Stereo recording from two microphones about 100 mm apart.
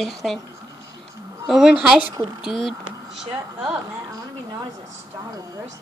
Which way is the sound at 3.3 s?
10° right (ahead or behind).